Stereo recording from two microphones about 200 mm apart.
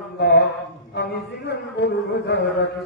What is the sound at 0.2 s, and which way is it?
Mantra, 55° left (ahead or behind).